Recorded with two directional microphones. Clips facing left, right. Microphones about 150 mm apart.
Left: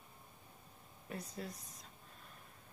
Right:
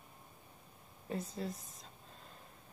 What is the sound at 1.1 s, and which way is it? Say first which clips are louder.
Speech: right 5 dB; 25° right (ahead or behind).